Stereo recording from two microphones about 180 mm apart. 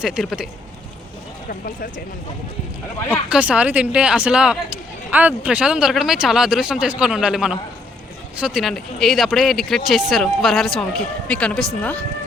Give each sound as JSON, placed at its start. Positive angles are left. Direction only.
{"t": 0.0, "sound": "speech", "side_deg": 0}
{"t": 1.5, "sound": "speech", "side_deg": 50}
{"t": 3.2, "sound": "speech", "side_deg": -5}